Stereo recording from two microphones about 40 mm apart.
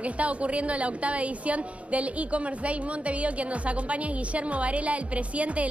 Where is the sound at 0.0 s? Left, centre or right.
Right.